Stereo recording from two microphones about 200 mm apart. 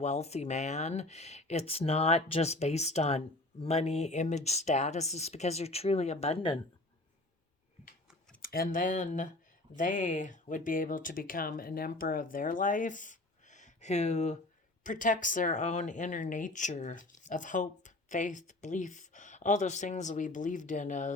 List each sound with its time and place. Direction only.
0.0 s speech: 35° left (ahead or behind)
8.4 s speech: 45° left (ahead or behind)